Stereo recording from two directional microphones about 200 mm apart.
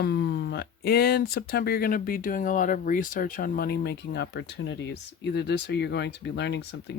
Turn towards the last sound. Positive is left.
turn(degrees=60)  # may be behind; listen again after turning